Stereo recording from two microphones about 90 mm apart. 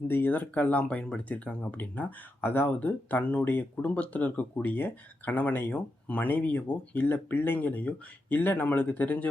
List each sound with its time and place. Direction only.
0.1 s speech: 20° left (ahead or behind)